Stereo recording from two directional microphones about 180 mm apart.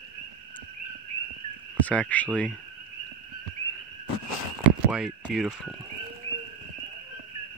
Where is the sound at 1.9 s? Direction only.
10° left (ahead or behind).